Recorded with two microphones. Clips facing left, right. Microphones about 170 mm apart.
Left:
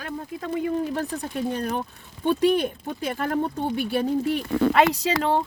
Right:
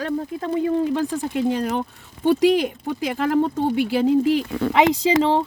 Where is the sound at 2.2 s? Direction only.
75° right (ahead or behind).